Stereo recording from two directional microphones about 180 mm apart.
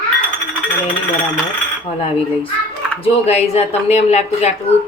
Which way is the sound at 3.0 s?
35° left (ahead or behind).